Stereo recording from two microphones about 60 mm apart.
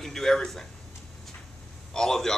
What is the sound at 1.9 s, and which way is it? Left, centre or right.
Speech, centre.